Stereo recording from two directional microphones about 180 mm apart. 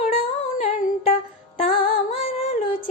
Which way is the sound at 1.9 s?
30° left (ahead or behind).